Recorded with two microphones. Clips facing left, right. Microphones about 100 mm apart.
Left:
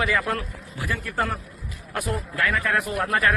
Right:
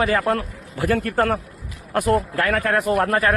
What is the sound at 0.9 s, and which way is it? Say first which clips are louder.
Speech: right 8 dB; 65° right (ahead or behind).